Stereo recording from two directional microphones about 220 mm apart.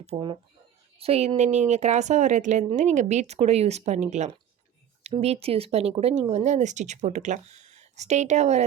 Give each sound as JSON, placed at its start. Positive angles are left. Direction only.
{"t": 0.0, "sound": "a woman's voice", "side_deg": -25}